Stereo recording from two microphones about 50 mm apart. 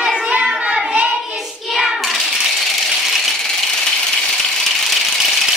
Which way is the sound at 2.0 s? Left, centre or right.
Centre.